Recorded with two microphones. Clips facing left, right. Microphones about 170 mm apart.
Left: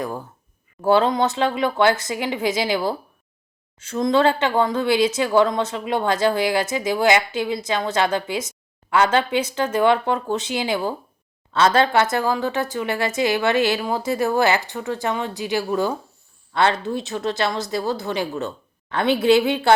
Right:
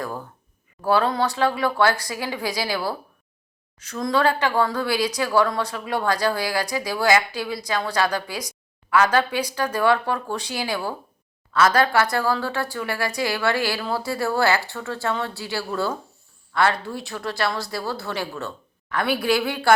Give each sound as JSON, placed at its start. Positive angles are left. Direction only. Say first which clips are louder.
{"t": 0.8, "sound": "a woman's voice", "louder": "left 3 dB", "side_deg": 25}